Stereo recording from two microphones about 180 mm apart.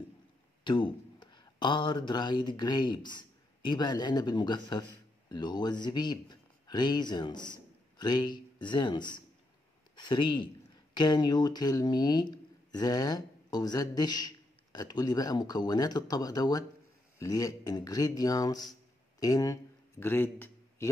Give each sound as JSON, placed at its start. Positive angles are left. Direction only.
{"t": 0.7, "sound": "speech", "side_deg": 25}